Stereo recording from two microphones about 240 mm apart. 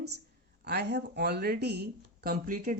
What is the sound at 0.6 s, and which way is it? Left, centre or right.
Speech, right.